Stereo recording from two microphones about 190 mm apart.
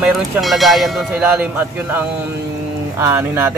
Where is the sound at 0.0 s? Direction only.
Centre (ahead or behind).